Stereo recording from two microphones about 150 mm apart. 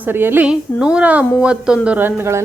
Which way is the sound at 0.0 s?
15° right (ahead or behind).